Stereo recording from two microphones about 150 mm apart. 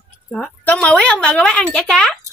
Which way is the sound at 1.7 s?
5° left (ahead or behind).